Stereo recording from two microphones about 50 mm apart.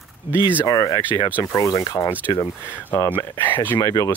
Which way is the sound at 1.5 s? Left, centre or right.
Left.